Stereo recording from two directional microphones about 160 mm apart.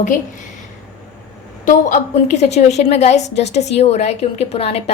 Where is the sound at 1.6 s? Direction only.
50° left (ahead or behind).